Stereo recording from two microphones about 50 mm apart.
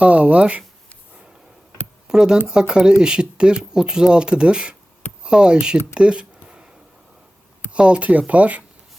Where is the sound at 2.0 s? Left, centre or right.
Centre.